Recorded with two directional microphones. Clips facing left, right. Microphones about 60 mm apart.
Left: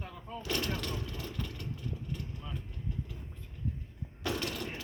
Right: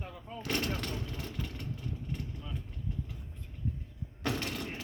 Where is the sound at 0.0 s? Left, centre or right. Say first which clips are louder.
Even; centre.